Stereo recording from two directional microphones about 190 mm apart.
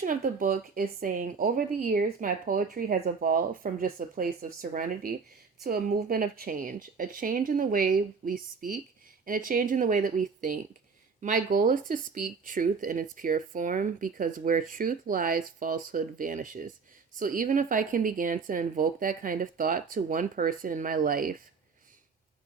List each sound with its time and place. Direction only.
0.0 s speech: 45° right (ahead or behind)